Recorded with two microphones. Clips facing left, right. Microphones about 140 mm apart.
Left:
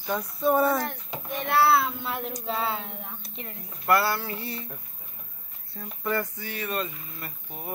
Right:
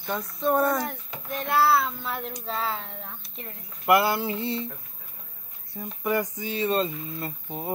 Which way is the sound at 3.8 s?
15° right (ahead or behind).